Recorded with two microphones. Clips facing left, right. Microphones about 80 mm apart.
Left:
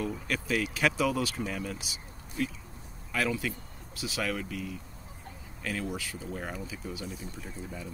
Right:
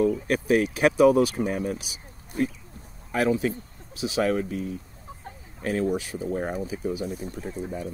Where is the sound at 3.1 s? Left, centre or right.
Right.